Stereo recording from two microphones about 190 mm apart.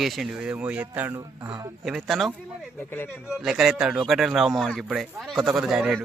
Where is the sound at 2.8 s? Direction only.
10° left (ahead or behind).